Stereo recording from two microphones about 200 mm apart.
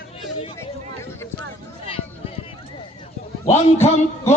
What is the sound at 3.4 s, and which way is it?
Speech, 35° left (ahead or behind).